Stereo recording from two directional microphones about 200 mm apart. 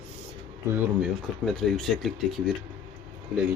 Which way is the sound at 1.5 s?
Centre (ahead or behind).